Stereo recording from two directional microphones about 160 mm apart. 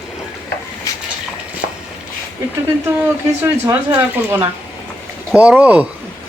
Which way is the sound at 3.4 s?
15° right (ahead or behind).